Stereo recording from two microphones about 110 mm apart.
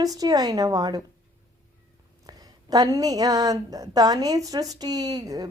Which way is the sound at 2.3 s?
35° right (ahead or behind).